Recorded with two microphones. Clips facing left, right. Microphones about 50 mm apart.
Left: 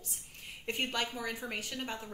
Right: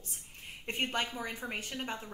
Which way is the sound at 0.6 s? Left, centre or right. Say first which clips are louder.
Right 1 dB; right.